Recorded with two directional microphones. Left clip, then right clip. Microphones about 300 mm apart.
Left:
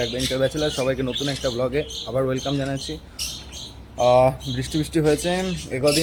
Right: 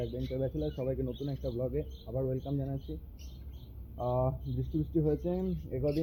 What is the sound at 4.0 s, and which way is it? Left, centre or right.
Speech, centre.